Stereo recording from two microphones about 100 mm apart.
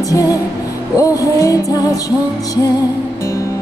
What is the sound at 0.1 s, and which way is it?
Music, 35° left (ahead or behind).